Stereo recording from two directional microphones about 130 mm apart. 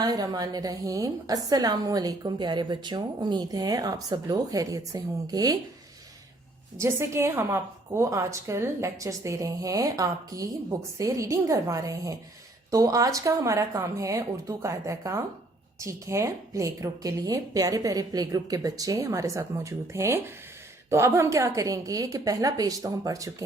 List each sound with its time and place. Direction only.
0.0 s a woman's voice: 30° right (ahead or behind)
6.7 s a woman's voice: 20° right (ahead or behind)